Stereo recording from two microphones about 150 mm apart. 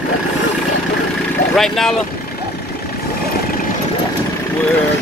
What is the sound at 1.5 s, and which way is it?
Speech, centre (ahead or behind).